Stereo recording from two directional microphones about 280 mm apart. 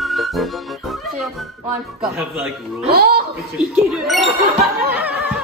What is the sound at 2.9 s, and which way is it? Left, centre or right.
Speech, right.